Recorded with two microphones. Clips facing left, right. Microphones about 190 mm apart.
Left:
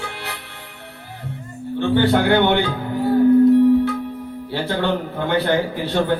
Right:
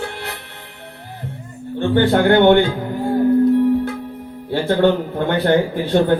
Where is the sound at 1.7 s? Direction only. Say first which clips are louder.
Right 1 dB; 50° right (ahead or behind).